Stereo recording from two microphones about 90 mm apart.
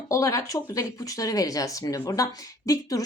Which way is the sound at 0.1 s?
35° left (ahead or behind).